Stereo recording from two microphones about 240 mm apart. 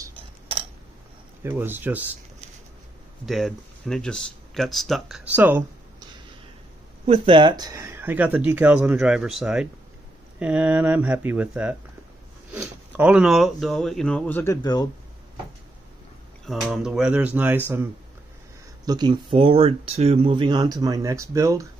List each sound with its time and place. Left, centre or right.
0.0 s a sound: centre
1.4 s speech: centre
3.3 s speech: centre
7.1 s speech: right; by 14.9 s centre
16.4 s speech: centre
18.9 s speech: centre